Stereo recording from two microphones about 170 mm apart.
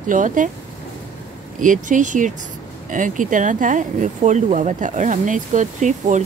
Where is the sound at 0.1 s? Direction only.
50° right (ahead or behind).